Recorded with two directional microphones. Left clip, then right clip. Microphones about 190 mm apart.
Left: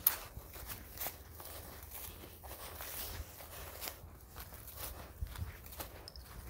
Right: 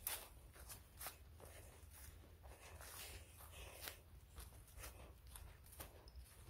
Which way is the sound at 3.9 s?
5° right (ahead or behind).